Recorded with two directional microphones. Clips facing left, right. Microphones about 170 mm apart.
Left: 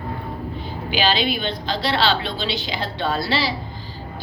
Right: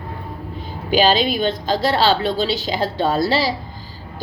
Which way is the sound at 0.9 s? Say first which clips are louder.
Right 5 dB; 45° right (ahead or behind).